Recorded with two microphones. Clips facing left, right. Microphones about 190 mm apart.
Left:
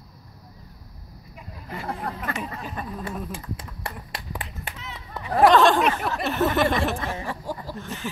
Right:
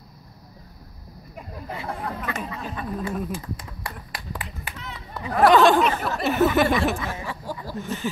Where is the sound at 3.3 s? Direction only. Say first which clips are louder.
Right 3 dB; 25° left (ahead or behind).